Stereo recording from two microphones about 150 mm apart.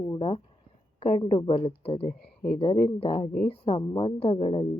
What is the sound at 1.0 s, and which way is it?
Speech, 50° left (ahead or behind).